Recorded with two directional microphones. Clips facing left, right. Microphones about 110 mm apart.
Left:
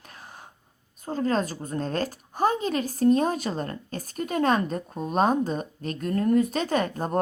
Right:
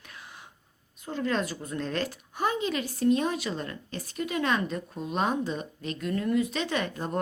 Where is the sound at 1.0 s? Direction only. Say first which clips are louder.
Left 4 dB; 40° left (ahead or behind).